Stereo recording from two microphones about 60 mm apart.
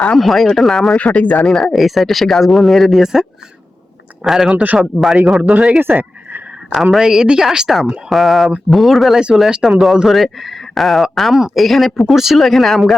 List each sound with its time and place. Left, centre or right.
0.2 s speech: centre
0.9 s speech: left
1.5 s speech: centre
4.3 s speech: centre
4.5 s speech: right
5.8 s a sound: right
6.7 s speech: centre